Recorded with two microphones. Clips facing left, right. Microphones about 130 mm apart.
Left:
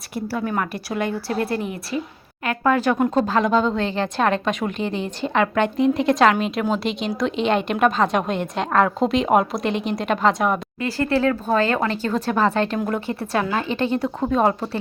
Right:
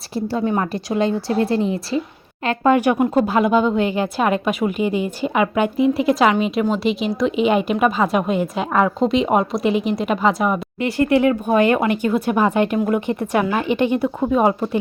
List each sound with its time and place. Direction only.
0.1 s a woman's voice: 25° right (ahead or behind)
2.7 s a woman's voice: 15° right (ahead or behind)
10.8 s a woman's voice: 20° right (ahead or behind)